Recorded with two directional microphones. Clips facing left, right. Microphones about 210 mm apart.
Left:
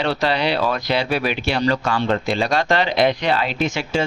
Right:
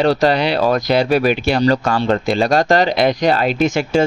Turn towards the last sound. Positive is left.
turn(degrees=-45)  # may be behind; listen again after turning